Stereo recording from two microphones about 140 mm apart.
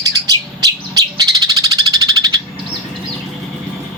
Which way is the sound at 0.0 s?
25° right (ahead or behind).